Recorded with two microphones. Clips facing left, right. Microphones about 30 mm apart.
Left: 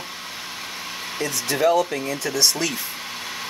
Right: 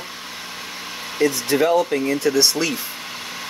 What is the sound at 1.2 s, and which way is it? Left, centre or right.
Speech, centre.